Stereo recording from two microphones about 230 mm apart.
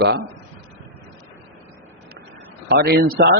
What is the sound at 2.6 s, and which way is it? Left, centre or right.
Speech, right.